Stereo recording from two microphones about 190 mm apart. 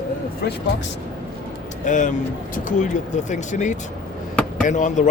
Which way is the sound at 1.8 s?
40° left (ahead or behind).